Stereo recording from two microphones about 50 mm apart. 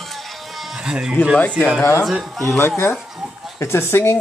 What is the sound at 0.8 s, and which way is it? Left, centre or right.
Speech, centre.